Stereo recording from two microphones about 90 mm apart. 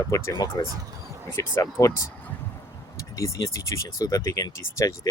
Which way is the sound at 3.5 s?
35° left (ahead or behind).